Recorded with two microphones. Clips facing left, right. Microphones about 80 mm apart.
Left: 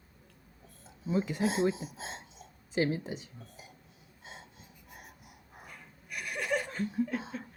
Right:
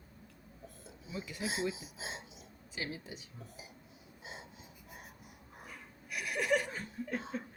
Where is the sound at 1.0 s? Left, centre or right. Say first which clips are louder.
Left 13 dB; left.